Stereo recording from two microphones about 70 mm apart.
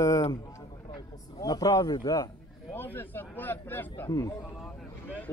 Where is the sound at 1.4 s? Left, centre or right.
Left.